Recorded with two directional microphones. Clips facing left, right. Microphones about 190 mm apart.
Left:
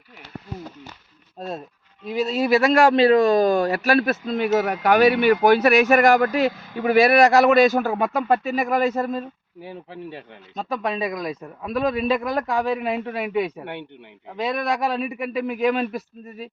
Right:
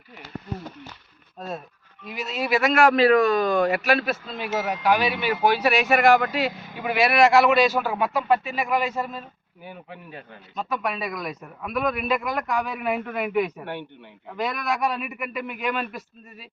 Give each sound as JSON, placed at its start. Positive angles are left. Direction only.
{"t": 2.0, "sound": "a man's voice", "side_deg": 35}
{"t": 9.6, "sound": "a man's voice", "side_deg": 30}